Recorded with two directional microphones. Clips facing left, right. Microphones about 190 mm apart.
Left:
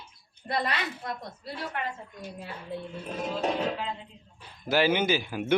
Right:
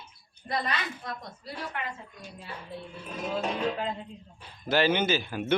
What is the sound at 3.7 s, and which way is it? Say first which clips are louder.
Speech: right 3 dB; 45° right (ahead or behind).